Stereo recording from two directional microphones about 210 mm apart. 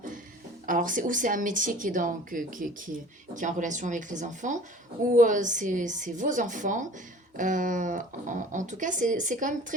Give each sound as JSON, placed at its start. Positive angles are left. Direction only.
{"t": 0.7, "sound": "speech", "side_deg": -40}